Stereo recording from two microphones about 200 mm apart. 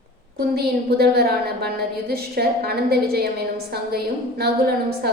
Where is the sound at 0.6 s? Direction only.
50° right (ahead or behind).